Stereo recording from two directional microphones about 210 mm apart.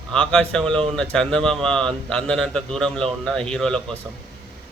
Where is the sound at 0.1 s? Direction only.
5° left (ahead or behind).